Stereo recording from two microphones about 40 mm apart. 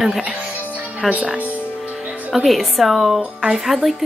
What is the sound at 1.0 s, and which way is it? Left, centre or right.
Speech, right.